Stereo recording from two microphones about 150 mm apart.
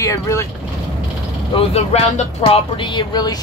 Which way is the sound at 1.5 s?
45° left (ahead or behind).